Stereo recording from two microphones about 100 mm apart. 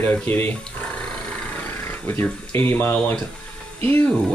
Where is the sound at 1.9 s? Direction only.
20° left (ahead or behind).